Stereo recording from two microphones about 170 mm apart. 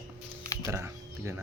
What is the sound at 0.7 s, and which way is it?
Speech, 15° right (ahead or behind).